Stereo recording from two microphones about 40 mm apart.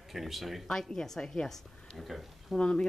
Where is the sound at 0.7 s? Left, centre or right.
Centre.